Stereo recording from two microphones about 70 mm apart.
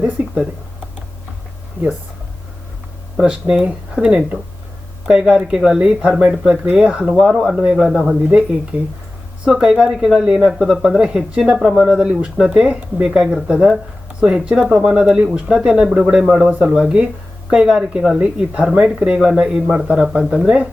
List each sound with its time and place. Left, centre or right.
3.2 s speech: centre
7.9 s speech: centre
8.1 s speech: centre
9.5 s speech: centre